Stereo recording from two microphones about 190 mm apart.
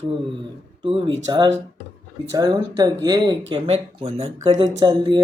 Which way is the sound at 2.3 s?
20° right (ahead or behind).